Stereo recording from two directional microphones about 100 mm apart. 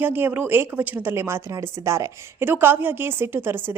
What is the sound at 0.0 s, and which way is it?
A woman's voice, 20° right (ahead or behind).